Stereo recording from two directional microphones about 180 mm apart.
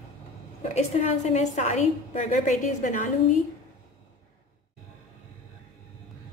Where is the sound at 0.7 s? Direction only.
40° left (ahead or behind).